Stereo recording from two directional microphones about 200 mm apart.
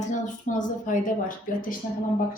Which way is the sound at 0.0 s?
40° left (ahead or behind).